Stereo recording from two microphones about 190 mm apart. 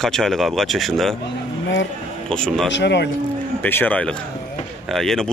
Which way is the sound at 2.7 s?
65° left (ahead or behind).